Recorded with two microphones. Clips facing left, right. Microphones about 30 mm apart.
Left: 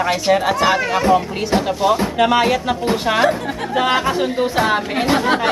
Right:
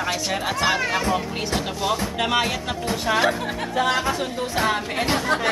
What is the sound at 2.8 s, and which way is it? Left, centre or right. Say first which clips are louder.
A woman's voice: left 4 dB; left.